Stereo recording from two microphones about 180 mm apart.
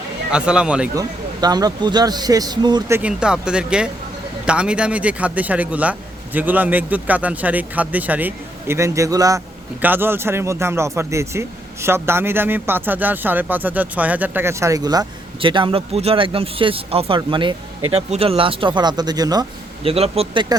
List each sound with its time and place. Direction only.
0.3 s speech: 5° right (ahead or behind)
0.9 s speech: 20° right (ahead or behind)
3.0 s speech: 5° right (ahead or behind); by 20.6 s 25° right (ahead or behind)